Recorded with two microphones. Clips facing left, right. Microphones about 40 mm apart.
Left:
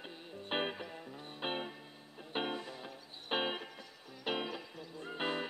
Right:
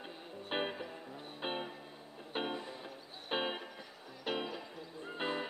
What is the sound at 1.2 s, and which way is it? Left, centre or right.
Music, centre.